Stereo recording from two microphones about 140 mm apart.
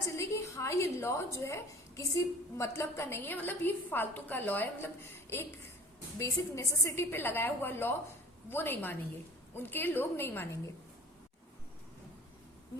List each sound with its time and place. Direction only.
0.2 s a woman's voice: 20° left (ahead or behind)